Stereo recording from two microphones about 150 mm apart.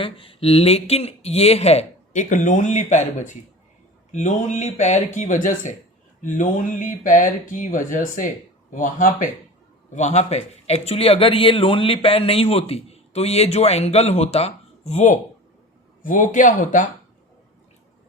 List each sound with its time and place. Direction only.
0.0 s a man's voice: 35° left (ahead or behind); by 9.3 s 60° left (ahead or behind)
9.9 s a man's voice: 50° left (ahead or behind)